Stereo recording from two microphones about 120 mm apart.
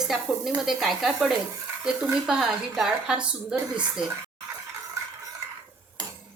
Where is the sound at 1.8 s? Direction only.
5° right (ahead or behind).